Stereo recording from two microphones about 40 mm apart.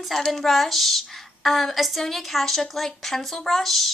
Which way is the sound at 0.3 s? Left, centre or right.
Centre.